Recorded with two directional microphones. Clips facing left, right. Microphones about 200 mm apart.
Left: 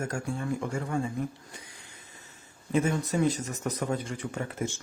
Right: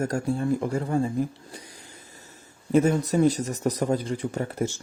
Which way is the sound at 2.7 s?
40° right (ahead or behind).